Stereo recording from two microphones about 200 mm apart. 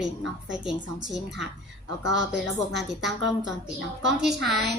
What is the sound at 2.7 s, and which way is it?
Speech, centre (ahead or behind).